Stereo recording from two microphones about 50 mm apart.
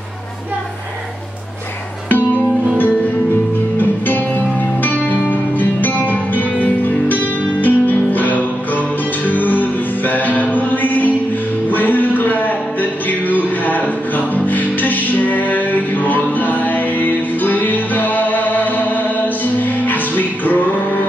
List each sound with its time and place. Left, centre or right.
4.8 s music: left
11.7 s a sound: left
13.3 s music: left